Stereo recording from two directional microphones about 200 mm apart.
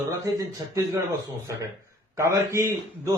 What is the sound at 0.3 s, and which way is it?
Speech, 15° right (ahead or behind).